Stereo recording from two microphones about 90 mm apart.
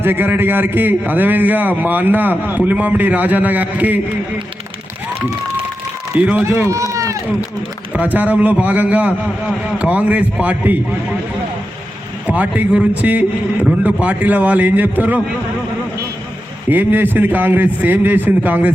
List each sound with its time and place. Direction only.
0.0 s a man's voice: 25° right (ahead or behind)
6.1 s a man's voice: 15° right (ahead or behind)
6.4 s speech: 30° right (ahead or behind)
7.9 s a man's voice: 15° right (ahead or behind)
12.3 s a man's voice: 15° right (ahead or behind)
16.6 s a man's voice: 20° right (ahead or behind)